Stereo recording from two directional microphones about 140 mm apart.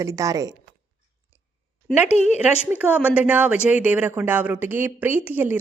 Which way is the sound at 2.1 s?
50° left (ahead or behind).